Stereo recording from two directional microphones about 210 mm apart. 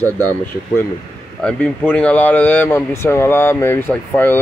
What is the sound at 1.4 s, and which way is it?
Speech, 5° left (ahead or behind).